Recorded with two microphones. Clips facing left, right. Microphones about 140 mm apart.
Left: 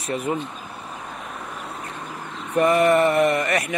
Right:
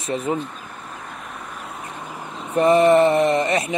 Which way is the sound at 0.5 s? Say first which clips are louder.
Left 1 dB; 10° left (ahead or behind).